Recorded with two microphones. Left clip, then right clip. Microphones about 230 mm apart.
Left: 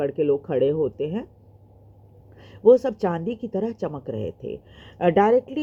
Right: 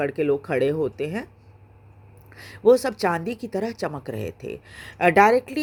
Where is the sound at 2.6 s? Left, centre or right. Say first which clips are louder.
Left 1 dB; right.